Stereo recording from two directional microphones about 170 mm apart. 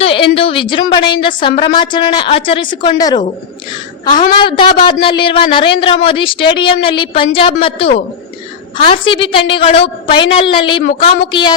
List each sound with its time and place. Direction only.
0.0 s a woman's voice: 35° left (ahead or behind)
4.2 s a woman's voice: 30° left (ahead or behind)